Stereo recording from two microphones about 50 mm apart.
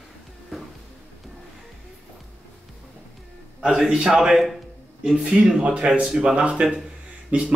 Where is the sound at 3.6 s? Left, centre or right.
Centre.